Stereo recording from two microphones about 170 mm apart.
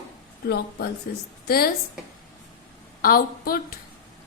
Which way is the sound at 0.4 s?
70° left (ahead or behind).